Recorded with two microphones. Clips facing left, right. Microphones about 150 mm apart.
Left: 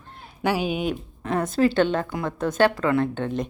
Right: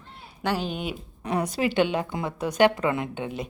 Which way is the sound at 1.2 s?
15° right (ahead or behind).